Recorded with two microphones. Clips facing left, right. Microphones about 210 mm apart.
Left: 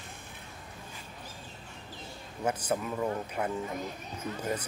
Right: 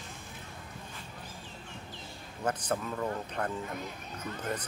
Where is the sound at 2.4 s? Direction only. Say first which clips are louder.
Left 2 dB; 10° left (ahead or behind).